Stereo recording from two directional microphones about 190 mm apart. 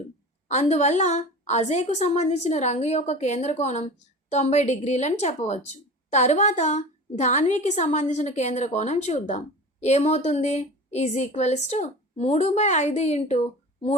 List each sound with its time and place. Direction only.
0.4 s speech: 35° left (ahead or behind)